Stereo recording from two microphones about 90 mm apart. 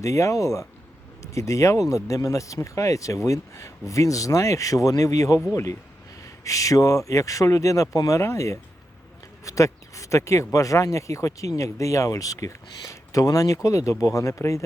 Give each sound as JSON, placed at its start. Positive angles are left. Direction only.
{"t": 0.0, "sound": "speech", "side_deg": 35}
{"t": 6.4, "sound": "speech", "side_deg": 40}